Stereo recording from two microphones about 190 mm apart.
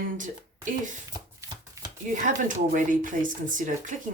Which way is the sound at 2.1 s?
40° right (ahead or behind).